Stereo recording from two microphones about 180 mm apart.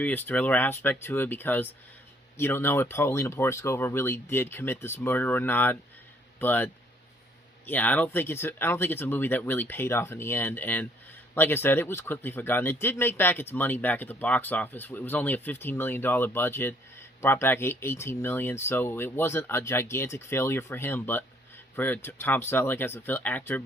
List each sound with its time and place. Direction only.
0.0 s speech: 10° left (ahead or behind)
7.7 s speech: 10° left (ahead or behind)